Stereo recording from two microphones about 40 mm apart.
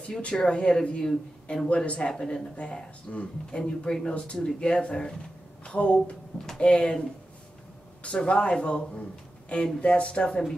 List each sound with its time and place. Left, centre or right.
0.2 s speech: left
3.1 s speech: left
3.6 s speech: left
5.9 s speech: centre
6.6 s speech: left
8.2 s speech: left